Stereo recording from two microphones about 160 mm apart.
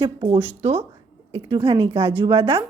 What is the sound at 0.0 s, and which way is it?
A woman's voice, 35° right (ahead or behind).